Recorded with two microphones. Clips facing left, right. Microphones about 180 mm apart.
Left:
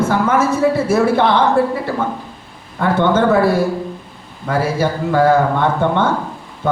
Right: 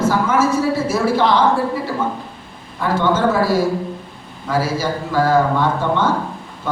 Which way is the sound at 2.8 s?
60° left (ahead or behind).